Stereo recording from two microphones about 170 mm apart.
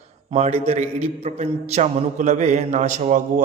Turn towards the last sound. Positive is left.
turn(degrees=-45)  # may be behind; listen again after turning